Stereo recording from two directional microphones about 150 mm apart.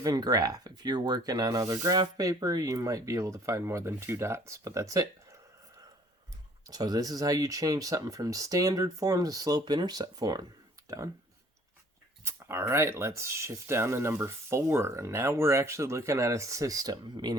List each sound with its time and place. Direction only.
0.0 s speech: 25° right (ahead or behind)
6.7 s speech: 25° right (ahead or behind)
12.2 s speech: 15° right (ahead or behind)